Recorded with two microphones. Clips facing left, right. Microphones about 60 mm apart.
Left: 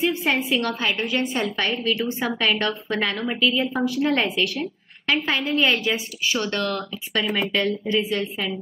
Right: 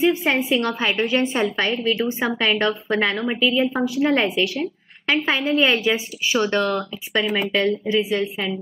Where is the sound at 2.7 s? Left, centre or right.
Centre.